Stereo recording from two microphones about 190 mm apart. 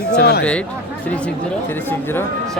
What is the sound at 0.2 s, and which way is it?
Speech, 60° left (ahead or behind).